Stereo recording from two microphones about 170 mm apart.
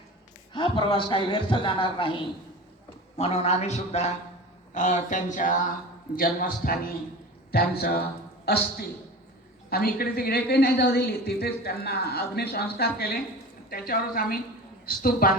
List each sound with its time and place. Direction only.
0.5 s a man's voice: 30° left (ahead or behind); by 8.0 s 60° left (ahead or behind)
9.6 s a woman's voice: 60° left (ahead or behind)